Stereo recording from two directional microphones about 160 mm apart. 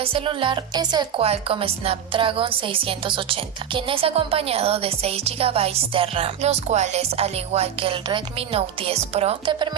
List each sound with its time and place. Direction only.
0.0 s speech: 35° right (ahead or behind)